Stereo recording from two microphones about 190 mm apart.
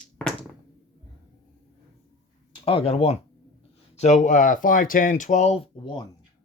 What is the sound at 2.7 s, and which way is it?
Speech, 30° left (ahead or behind).